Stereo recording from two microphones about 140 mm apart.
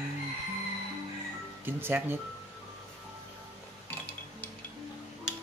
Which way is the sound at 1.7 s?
15° right (ahead or behind).